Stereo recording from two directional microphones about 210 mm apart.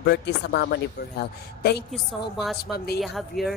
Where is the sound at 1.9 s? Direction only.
Centre (ahead or behind).